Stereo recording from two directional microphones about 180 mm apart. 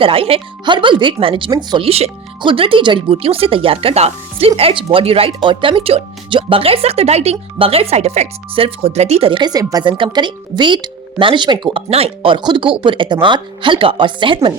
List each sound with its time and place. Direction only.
0.0 s speech: 30° right (ahead or behind)